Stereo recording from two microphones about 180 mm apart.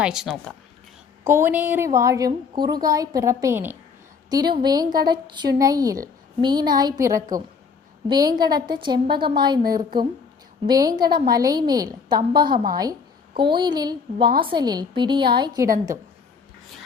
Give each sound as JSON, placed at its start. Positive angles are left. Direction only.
{"t": 0.0, "sound": "speech", "side_deg": 0}
{"t": 1.3, "sound": "a woman's voice", "side_deg": -10}